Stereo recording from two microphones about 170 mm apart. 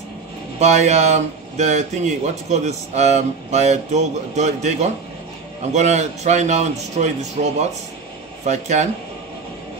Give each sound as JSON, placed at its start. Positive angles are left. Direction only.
{"t": 0.6, "sound": "speech", "side_deg": -40}
{"t": 8.5, "sound": "speech", "side_deg": -45}